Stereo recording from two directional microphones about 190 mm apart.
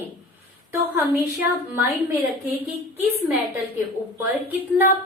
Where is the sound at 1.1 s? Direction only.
10° right (ahead or behind).